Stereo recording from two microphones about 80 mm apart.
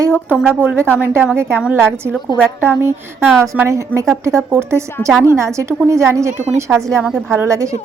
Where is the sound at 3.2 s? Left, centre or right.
Centre.